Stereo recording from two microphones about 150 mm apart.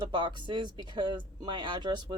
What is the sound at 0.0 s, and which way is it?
Speech, 30° right (ahead or behind).